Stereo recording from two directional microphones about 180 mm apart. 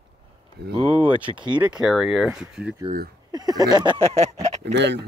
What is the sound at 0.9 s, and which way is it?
Speech, 10° right (ahead or behind).